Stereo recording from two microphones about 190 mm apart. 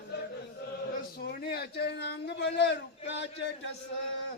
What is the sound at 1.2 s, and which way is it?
A man's voice, 55° left (ahead or behind).